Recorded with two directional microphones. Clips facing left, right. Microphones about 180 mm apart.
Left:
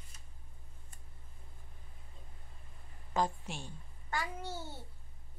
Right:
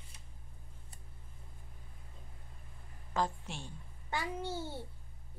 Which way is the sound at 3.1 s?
15° left (ahead or behind).